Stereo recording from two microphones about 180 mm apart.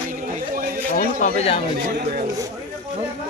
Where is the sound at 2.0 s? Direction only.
60° right (ahead or behind).